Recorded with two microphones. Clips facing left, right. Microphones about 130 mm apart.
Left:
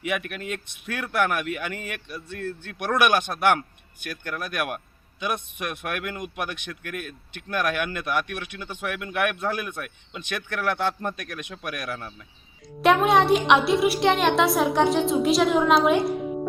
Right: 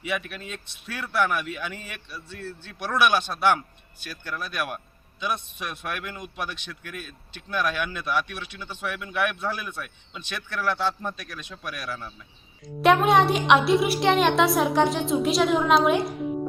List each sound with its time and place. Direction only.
0.0 s speech: 55° left (ahead or behind)
12.8 s a woman's voice: centre (ahead or behind)